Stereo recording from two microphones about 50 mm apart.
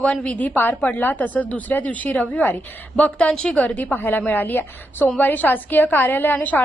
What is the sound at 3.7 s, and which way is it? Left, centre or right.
A woman's voice, left.